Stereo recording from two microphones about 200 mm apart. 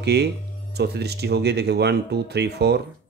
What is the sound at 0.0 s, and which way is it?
A man's voice, 55° right (ahead or behind).